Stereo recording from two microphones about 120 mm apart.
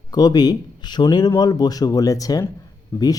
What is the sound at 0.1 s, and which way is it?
Speech, 35° left (ahead or behind).